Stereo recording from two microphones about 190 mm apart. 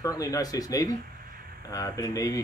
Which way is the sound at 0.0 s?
20° left (ahead or behind).